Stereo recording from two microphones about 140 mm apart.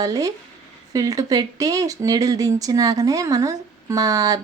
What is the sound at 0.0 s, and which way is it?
Speech, 25° right (ahead or behind).